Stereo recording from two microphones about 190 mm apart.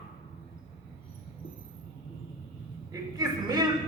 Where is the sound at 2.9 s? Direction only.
20° right (ahead or behind).